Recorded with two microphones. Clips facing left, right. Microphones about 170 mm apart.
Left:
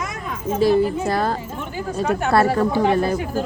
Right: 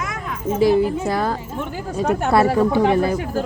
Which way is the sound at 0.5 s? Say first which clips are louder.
Right 1 dB; 15° right (ahead or behind).